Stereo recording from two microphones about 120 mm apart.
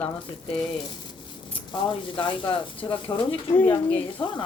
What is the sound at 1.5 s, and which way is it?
Speech, 40° left (ahead or behind).